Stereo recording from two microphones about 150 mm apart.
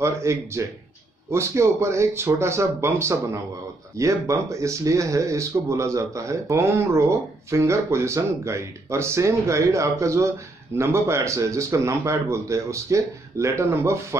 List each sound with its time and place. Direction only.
0.0 s speech: 20° right (ahead or behind)